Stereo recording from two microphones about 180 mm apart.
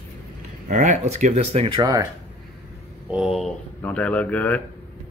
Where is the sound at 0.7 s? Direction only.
40° right (ahead or behind); by 2.1 s 20° right (ahead or behind).